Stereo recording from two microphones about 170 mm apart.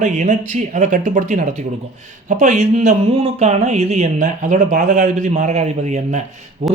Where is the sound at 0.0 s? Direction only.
45° right (ahead or behind).